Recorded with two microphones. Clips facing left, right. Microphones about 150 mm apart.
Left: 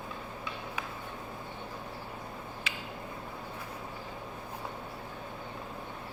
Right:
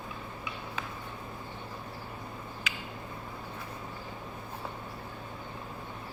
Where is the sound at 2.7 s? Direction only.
30° left (ahead or behind).